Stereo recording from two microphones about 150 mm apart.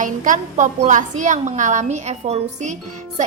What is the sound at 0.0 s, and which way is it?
A woman's voice, 55° right (ahead or behind).